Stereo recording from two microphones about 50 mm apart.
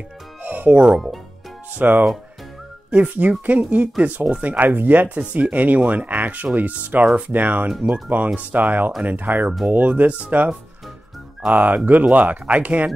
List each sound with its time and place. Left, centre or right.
0.4 s music: right
0.9 s speech: centre
1.8 s speech: right
7.6 s speech: centre
7.9 s speech: right
11.5 s speech: right